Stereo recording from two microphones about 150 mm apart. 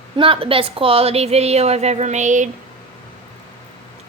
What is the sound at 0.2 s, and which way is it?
A woman's voice, 35° right (ahead or behind).